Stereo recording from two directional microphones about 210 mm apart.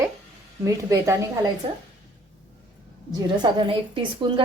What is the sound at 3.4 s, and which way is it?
A woman's voice, 20° right (ahead or behind).